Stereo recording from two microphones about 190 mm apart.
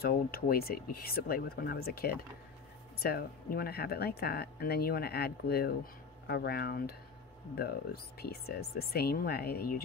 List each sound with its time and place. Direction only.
0.0 s speech: 50° left (ahead or behind)